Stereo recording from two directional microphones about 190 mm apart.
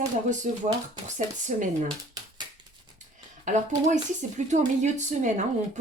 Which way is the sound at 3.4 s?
40° right (ahead or behind).